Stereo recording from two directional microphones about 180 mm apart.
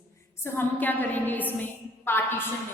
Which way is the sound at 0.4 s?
10° left (ahead or behind).